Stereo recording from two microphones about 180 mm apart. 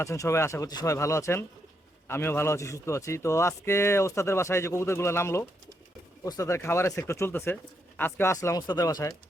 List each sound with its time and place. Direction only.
0.0 s a man's voice: 15° left (ahead or behind)